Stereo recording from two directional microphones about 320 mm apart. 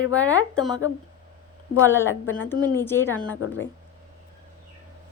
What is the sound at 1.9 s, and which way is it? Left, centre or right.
Speech, centre.